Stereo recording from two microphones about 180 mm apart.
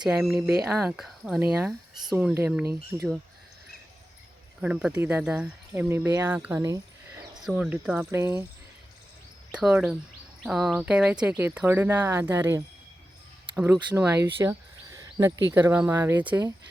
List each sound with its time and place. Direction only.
0.0 s speech: 5° right (ahead or behind)
4.6 s speech: 5° right (ahead or behind)
7.4 s speech: 5° right (ahead or behind)
9.5 s speech: 5° right (ahead or behind)
13.9 s speech: 15° right (ahead or behind)